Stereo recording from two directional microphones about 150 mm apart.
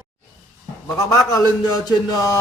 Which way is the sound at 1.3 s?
25° left (ahead or behind).